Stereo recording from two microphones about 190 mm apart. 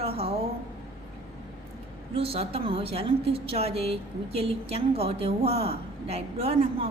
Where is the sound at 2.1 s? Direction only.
30° right (ahead or behind).